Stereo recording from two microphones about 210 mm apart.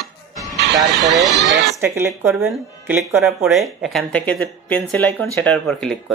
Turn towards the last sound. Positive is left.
turn(degrees=5)  # may be behind; listen again after turning